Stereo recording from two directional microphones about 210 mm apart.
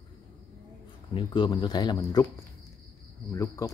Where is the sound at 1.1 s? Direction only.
20° left (ahead or behind).